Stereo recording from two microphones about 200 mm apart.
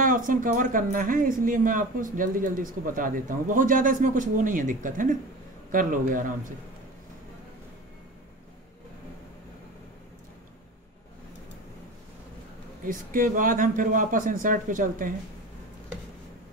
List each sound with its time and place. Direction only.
0.0 s a man's voice: 40° right (ahead or behind)
12.8 s speech: 40° right (ahead or behind)